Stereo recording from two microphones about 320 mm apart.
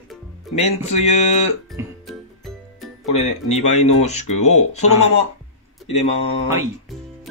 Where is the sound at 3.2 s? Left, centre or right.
Left.